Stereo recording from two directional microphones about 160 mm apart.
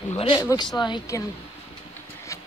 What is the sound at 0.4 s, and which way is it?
Speech, 20° left (ahead or behind).